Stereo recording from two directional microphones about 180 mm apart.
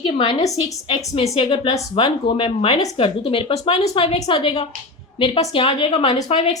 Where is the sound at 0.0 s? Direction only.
25° left (ahead or behind).